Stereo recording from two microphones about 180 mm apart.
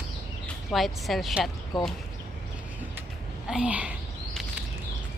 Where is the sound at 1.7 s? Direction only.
25° left (ahead or behind).